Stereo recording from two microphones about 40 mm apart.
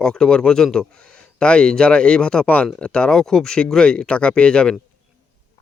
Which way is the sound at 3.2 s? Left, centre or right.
Centre.